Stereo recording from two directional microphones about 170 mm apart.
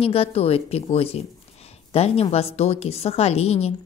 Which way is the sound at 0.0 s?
35° left (ahead or behind).